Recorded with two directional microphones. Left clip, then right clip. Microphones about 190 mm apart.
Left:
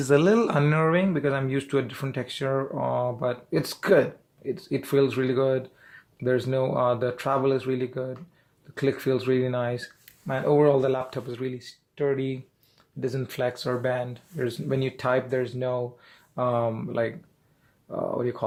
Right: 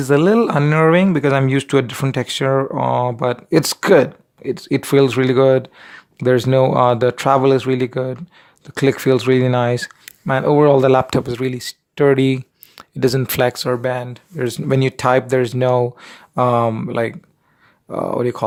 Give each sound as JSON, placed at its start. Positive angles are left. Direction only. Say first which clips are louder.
{"t": 0.0, "sound": "speech", "louder": "right 7 dB", "side_deg": -35}